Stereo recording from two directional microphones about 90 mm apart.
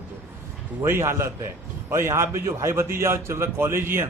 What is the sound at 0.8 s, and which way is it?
A man's voice, 30° right (ahead or behind).